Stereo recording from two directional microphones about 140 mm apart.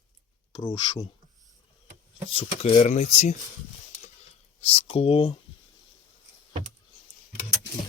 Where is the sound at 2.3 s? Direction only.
45° left (ahead or behind).